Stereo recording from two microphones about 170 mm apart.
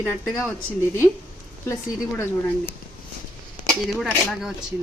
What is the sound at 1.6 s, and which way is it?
Speech, 15° left (ahead or behind).